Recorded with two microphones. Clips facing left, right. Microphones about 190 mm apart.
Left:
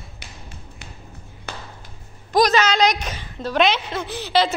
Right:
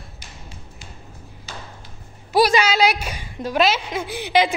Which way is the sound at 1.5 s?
60° left (ahead or behind).